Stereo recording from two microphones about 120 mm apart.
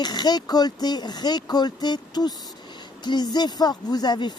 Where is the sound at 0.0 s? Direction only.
35° left (ahead or behind).